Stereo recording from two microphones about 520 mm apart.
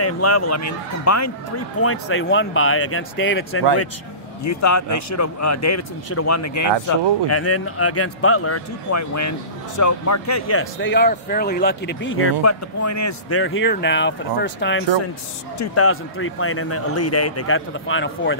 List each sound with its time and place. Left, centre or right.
0.0 s a man's voice: left